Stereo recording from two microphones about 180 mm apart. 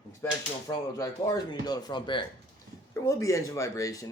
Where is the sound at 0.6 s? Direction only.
20° left (ahead or behind).